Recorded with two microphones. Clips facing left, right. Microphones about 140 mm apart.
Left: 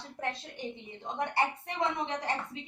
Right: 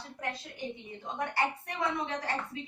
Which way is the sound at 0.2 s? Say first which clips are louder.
Left 1 dB; 25° left (ahead or behind).